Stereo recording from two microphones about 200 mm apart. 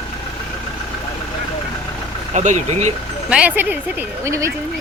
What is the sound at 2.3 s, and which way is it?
Speech, 35° right (ahead or behind).